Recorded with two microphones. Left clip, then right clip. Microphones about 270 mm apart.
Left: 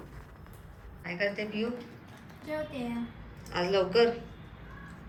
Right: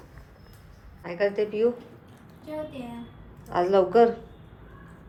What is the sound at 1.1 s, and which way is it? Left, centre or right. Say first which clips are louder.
Speech: right 7 dB; right.